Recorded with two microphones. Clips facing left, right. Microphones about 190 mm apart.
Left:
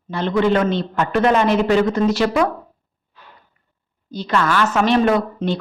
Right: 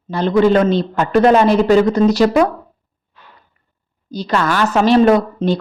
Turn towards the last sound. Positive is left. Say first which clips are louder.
# right 5 dB
turn(degrees=-35)  # may be behind; listen again after turning